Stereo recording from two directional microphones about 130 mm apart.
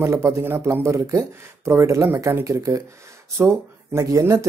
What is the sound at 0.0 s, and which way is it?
Speech, 20° right (ahead or behind).